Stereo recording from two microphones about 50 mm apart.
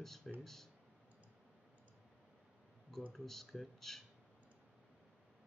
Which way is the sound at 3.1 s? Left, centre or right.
Centre.